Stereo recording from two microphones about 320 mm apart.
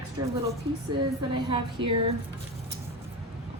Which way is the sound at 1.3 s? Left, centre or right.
Centre.